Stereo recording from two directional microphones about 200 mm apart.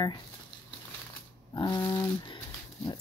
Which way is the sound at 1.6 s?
20° left (ahead or behind).